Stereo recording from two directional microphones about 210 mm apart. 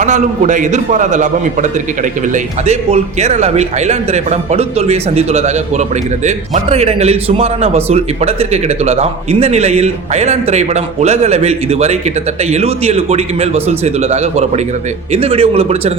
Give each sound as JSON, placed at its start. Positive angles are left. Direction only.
{"t": 0.0, "sound": "a man's voice", "side_deg": -35}